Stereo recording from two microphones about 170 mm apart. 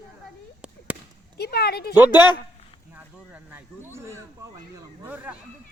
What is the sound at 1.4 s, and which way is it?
Speech, 70° left (ahead or behind).